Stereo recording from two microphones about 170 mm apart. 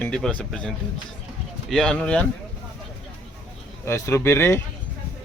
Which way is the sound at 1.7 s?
5° left (ahead or behind).